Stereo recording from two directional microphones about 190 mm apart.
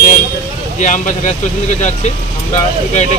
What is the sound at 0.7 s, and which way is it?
Speech, 40° left (ahead or behind).